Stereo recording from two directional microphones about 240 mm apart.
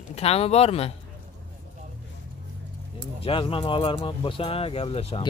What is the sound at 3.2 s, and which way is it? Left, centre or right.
Speech, left.